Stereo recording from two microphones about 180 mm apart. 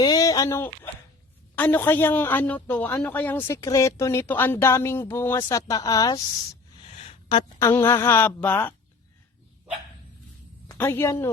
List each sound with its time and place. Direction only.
0.0 s a woman's voice: 20° left (ahead or behind)
6.9 s a sound: 35° left (ahead or behind)
7.6 s a woman's voice: 15° left (ahead or behind)
10.7 s a woman's voice: 10° left (ahead or behind)